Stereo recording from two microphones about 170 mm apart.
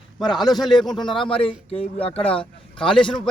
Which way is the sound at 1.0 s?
30° left (ahead or behind).